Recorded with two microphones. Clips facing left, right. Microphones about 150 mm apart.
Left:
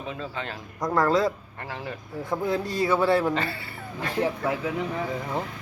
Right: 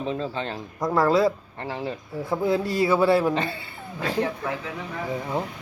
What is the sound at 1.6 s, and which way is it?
Cutlery, 25° right (ahead or behind).